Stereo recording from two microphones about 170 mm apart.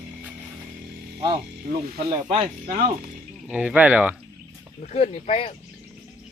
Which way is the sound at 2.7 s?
55° right (ahead or behind).